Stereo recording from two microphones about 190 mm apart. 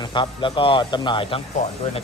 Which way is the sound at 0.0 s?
25° left (ahead or behind).